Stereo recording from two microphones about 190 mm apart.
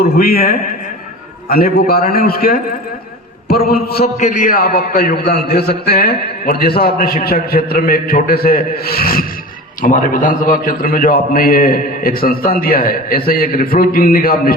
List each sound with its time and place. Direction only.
0.0 s a man's voice: 55° left (ahead or behind)